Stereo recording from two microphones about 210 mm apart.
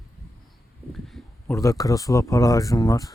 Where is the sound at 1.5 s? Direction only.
15° left (ahead or behind).